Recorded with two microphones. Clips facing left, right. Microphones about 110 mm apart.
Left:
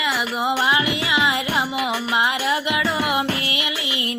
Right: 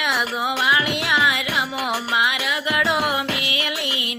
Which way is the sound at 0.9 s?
Centre (ahead or behind).